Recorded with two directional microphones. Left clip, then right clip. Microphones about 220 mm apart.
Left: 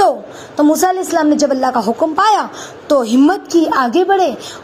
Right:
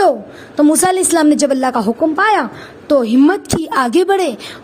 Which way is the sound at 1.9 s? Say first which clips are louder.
Even; 30° right (ahead or behind).